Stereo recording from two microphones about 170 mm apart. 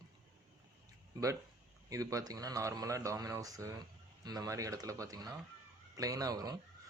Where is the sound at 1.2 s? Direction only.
20° right (ahead or behind).